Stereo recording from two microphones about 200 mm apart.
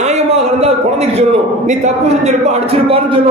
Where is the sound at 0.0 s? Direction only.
35° right (ahead or behind).